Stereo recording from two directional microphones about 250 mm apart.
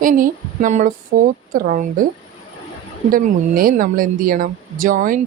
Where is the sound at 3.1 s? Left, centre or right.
Right.